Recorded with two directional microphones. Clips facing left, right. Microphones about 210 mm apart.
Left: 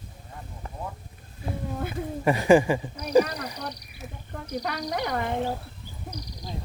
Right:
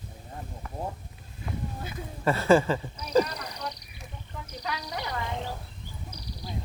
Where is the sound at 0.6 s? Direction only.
30° left (ahead or behind).